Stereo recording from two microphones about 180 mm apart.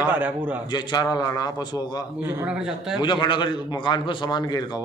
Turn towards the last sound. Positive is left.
turn(degrees=20)  # may be behind; listen again after turning